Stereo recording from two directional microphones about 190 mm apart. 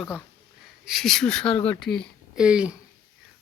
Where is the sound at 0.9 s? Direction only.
Centre (ahead or behind).